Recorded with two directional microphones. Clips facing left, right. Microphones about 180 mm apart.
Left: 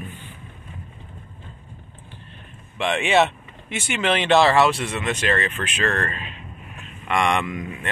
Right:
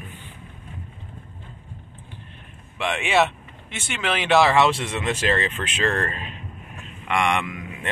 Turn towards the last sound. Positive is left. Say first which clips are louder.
# left 2 dB
turn(degrees=-10)  # may be behind; listen again after turning